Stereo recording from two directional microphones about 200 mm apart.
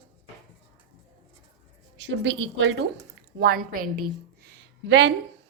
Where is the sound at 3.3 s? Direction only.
50° right (ahead or behind).